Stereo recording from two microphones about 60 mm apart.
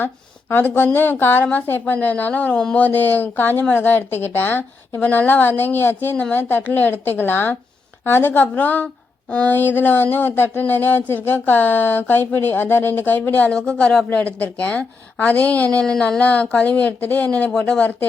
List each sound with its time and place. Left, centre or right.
0.0 s a woman's voice: left
13.5 s a woman's voice: centre